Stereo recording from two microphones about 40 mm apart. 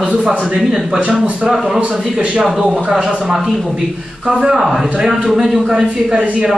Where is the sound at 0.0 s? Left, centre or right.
Right.